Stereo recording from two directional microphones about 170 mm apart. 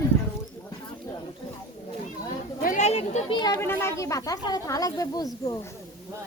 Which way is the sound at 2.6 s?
45° left (ahead or behind).